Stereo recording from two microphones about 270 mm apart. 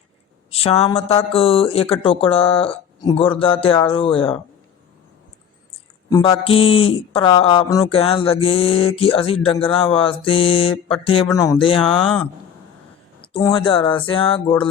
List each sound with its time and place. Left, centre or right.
0.5 s speech: left
6.1 s speech: centre
11.9 s speech: centre
13.2 s speech: centre